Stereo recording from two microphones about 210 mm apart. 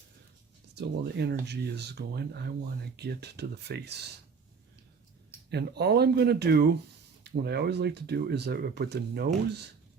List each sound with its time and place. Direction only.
0.8 s speech: 50° right (ahead or behind)
5.5 s speech: 50° right (ahead or behind)